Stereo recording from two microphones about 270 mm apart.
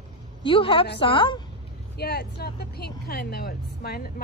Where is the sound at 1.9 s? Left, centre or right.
Left.